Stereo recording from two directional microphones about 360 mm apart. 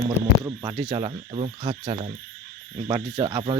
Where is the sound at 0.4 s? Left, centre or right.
Centre.